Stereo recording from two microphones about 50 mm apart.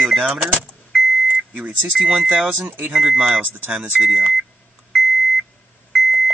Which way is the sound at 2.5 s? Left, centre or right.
Right.